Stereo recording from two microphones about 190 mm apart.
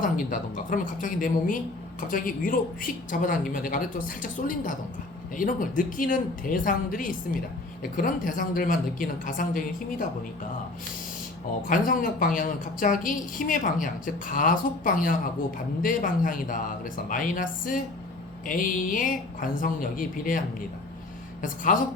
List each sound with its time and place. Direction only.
0.0 s a woman's voice: 45° left (ahead or behind)
11.7 s a woman's voice: 45° left (ahead or behind)
21.4 s a woman's voice: 45° left (ahead or behind)